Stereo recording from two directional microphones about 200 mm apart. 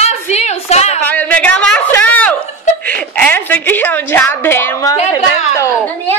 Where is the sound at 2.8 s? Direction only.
5° left (ahead or behind).